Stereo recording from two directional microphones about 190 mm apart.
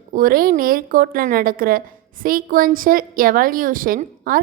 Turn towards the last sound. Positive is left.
turn(degrees=-50)  # may be behind; listen again after turning